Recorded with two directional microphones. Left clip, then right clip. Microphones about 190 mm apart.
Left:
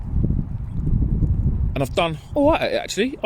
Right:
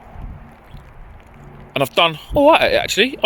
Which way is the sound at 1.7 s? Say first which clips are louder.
Right 6 dB; 10° left (ahead or behind).